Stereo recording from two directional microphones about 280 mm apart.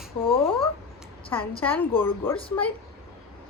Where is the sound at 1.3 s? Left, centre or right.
Centre.